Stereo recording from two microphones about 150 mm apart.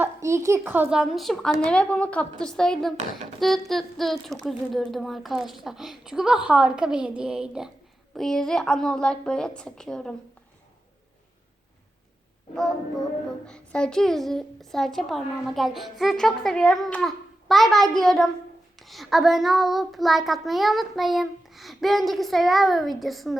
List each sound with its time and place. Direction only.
0.0 s child singing: 20° right (ahead or behind); by 10.2 s 5° left (ahead or behind)
12.5 s child singing: 5° left (ahead or behind)